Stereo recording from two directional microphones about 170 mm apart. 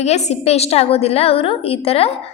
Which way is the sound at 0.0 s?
40° left (ahead or behind).